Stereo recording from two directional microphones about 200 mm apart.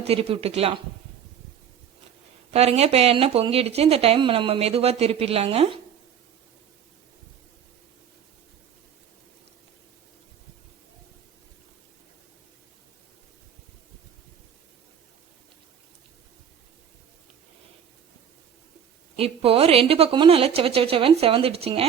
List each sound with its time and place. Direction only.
0.1 s speech: 30° right (ahead or behind)
2.5 s speech: 30° right (ahead or behind)
19.1 s speech: 30° right (ahead or behind)